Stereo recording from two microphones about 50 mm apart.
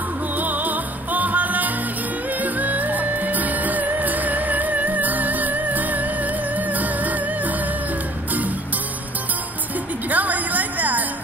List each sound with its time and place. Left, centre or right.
0.4 s music: right
10.0 s music: right